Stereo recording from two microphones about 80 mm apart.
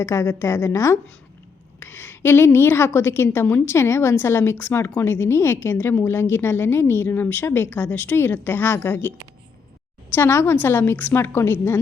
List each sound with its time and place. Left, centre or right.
0.0 s a woman's voice: left
10.2 s a woman's voice: left